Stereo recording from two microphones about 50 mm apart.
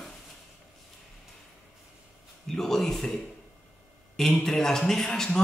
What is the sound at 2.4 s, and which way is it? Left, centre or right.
A man's voice, centre.